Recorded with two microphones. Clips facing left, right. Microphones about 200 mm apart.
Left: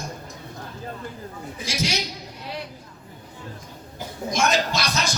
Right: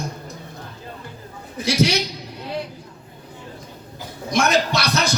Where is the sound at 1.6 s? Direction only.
65° right (ahead or behind).